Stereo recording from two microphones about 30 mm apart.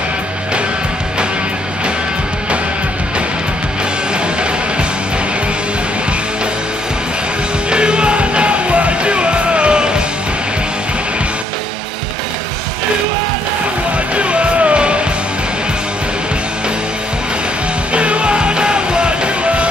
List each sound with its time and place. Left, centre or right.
7.7 s music: right
14.1 s music: right
17.9 s music: right